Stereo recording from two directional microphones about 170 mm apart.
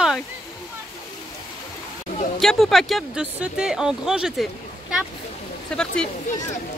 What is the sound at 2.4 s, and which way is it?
Speech, centre (ahead or behind).